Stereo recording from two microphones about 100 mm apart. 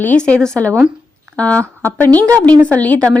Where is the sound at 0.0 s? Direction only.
15° left (ahead or behind).